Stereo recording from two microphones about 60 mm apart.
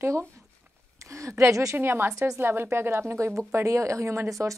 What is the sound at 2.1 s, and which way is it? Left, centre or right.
Speech, right.